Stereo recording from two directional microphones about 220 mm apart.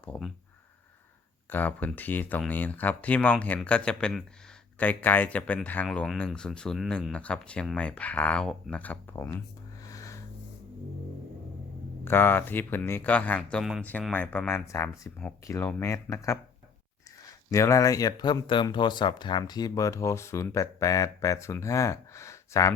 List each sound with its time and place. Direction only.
0.0 s speech: 5° left (ahead or behind)
1.5 s speech: 10° left (ahead or behind)
9.8 s a sound: 15° left (ahead or behind)
12.0 s speech: 10° left (ahead or behind)
17.5 s speech: 15° left (ahead or behind)